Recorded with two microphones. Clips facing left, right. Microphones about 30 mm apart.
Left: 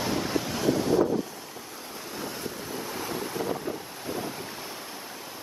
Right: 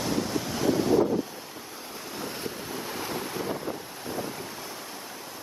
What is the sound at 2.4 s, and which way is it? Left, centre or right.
Waves, centre.